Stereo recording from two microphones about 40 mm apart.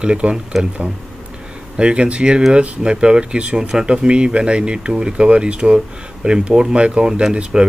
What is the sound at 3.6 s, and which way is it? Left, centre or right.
Speech, centre.